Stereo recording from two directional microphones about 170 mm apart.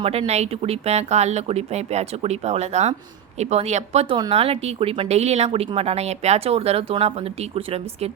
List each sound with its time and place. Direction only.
0.0 s a woman's voice: 35° right (ahead or behind)